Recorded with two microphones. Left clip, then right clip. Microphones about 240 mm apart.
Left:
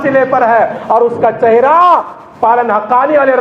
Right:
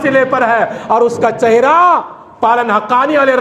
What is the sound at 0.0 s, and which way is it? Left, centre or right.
A man's voice, right.